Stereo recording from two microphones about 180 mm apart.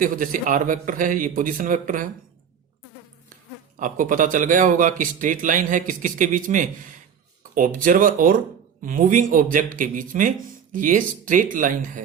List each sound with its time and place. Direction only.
0.0 s speech: 50° right (ahead or behind)
3.8 s speech: 45° right (ahead or behind)